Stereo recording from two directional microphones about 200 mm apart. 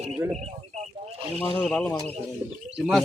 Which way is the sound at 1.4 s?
5° left (ahead or behind).